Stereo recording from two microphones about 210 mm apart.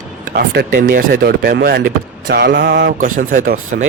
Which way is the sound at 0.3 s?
45° right (ahead or behind).